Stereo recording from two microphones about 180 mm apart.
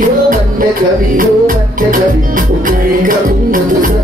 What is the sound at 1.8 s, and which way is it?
Music, 50° right (ahead or behind).